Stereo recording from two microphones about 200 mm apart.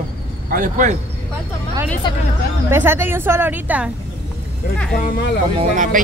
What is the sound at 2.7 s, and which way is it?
A woman's voice, 10° right (ahead or behind).